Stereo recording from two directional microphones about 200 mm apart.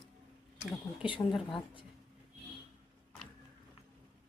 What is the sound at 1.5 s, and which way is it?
Speech, 25° left (ahead or behind).